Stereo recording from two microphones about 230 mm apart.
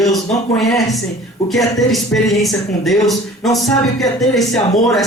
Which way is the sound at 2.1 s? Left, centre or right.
Centre.